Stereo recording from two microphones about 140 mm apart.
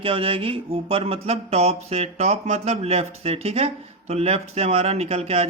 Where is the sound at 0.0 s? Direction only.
40° right (ahead or behind).